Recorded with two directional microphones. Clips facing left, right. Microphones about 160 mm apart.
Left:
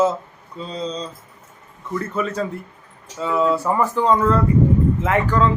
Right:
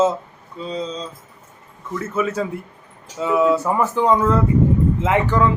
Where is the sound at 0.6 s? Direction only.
Centre (ahead or behind).